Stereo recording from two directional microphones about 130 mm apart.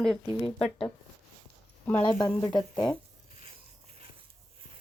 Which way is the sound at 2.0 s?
30° left (ahead or behind).